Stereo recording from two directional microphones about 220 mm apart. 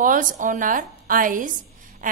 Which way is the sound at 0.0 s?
35° right (ahead or behind).